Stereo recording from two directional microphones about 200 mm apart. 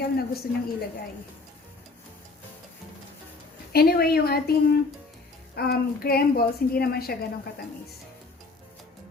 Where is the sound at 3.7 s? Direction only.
50° left (ahead or behind).